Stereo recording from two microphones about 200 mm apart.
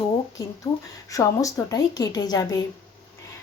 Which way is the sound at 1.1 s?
15° left (ahead or behind).